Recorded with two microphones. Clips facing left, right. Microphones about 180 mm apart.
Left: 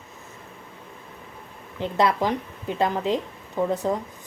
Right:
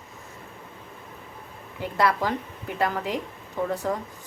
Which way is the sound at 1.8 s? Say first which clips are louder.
Left 2 dB; 20° left (ahead or behind).